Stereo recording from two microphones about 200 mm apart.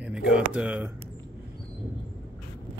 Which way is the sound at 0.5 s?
5° right (ahead or behind).